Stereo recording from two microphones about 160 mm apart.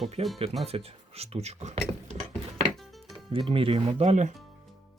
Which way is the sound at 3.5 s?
35° right (ahead or behind).